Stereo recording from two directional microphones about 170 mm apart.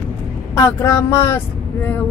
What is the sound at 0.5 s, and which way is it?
Speech, 15° left (ahead or behind).